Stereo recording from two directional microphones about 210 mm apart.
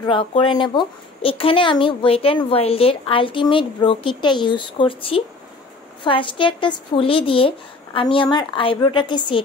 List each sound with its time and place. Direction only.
0.0 s speech: 25° left (ahead or behind)